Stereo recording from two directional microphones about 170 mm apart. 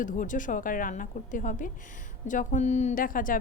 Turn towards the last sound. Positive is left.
turn(degrees=55)  # may be behind; listen again after turning